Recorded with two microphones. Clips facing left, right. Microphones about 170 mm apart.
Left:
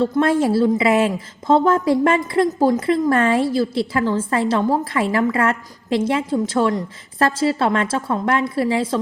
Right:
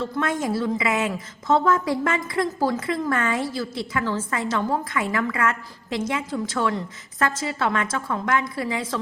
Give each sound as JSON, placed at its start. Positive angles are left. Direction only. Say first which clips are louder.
{"t": 0.0, "sound": "a woman's voice", "louder": "left 8 dB", "side_deg": 30}